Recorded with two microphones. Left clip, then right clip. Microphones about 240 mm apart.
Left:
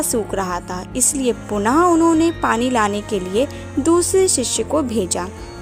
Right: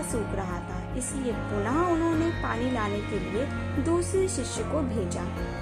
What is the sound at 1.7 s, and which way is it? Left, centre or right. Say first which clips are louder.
Speech: left 13 dB; left.